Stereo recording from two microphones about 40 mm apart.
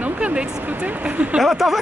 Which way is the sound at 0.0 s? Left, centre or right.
Right.